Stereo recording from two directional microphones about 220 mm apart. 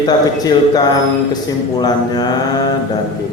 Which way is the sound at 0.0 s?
20° left (ahead or behind).